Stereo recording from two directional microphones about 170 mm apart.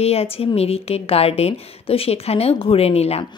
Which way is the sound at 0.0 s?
35° left (ahead or behind).